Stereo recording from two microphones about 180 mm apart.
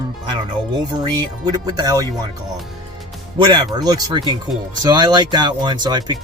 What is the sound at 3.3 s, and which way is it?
Speech, 25° right (ahead or behind).